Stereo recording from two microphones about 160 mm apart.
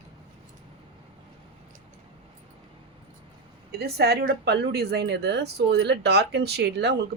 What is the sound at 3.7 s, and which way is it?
A woman's voice, 80° right.